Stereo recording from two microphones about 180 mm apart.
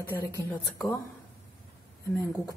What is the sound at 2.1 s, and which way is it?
Speech, 20° left (ahead or behind).